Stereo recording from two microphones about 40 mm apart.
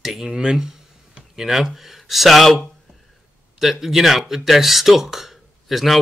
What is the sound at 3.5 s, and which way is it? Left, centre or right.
Speech, centre.